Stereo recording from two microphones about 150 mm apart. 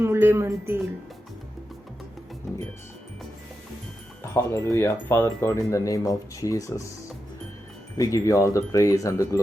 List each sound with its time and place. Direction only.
0.0 s a woman's voice: 15° right (ahead or behind)
4.2 s speech: 20° left (ahead or behind)
7.9 s speech: 20° left (ahead or behind)